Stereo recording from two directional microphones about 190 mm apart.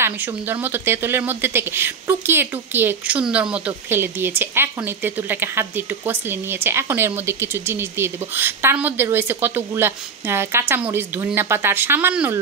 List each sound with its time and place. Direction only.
0.0 s speech: 10° right (ahead or behind)